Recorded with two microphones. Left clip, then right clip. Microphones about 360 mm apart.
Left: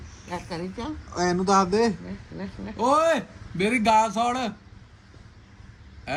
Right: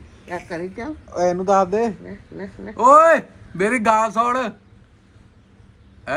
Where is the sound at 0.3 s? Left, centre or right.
Centre.